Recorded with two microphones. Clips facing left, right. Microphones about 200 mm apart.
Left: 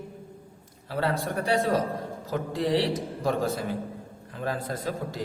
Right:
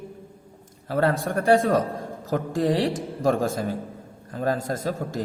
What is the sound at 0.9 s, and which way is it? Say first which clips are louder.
A man's voice: right 5 dB; 50° right (ahead or behind).